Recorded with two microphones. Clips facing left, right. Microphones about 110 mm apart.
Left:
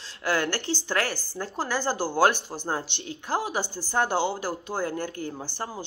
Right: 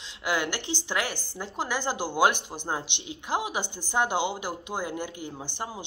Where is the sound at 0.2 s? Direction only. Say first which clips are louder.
Left 2 dB; 15° right (ahead or behind).